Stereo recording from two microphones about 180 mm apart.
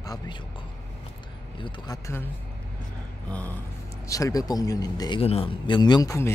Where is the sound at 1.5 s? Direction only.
25° left (ahead or behind).